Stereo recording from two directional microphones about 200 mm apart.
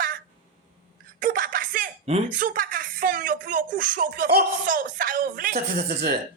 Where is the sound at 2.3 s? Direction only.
45° right (ahead or behind).